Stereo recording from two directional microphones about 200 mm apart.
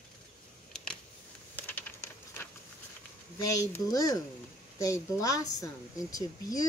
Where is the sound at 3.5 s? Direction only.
15° left (ahead or behind).